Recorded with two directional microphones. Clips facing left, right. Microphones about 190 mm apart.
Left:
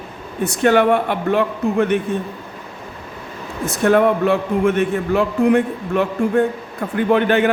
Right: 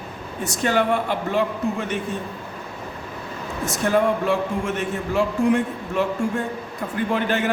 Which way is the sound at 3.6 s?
60° left (ahead or behind).